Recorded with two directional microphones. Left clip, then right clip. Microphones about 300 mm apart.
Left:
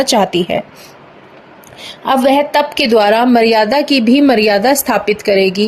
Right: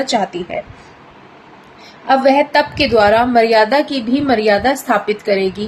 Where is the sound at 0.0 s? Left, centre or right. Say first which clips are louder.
Left 5 dB; left.